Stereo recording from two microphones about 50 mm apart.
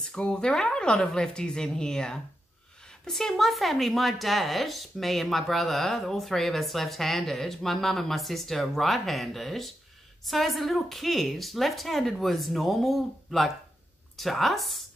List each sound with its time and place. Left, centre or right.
0.0 s a woman's voice: centre